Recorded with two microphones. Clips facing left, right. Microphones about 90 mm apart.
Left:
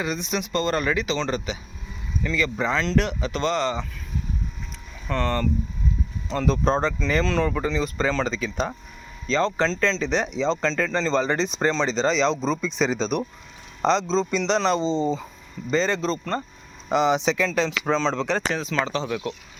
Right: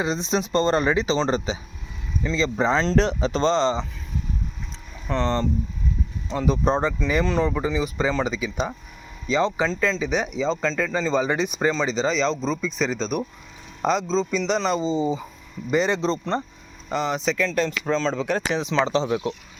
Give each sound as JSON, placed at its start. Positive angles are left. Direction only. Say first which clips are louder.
{"t": 0.0, "sound": "speech", "louder": "right 3 dB", "side_deg": -30}
{"t": 5.0, "sound": "speech", "louder": "right 1 dB", "side_deg": -20}
{"t": 6.3, "sound": "speech", "louder": "even", "side_deg": -10}
{"t": 16.9, "sound": "speech", "louder": "left 4 dB", "side_deg": 5}
{"t": 18.5, "sound": "speech", "louder": "right 4 dB", "side_deg": -20}